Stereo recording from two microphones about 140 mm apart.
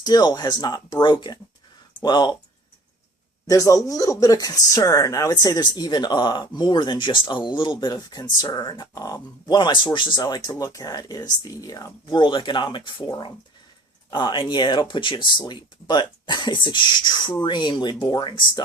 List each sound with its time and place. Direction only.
0.0 s speech: 30° left (ahead or behind)
3.4 s speech: 25° left (ahead or behind)